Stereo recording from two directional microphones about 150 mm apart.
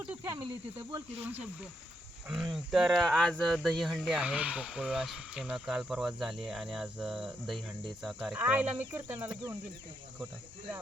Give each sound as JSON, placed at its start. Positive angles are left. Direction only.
{"t": 0.0, "sound": "snake", "side_deg": -10}
{"t": 0.4, "sound": "speech", "side_deg": -35}
{"t": 2.3, "sound": "speech", "side_deg": 0}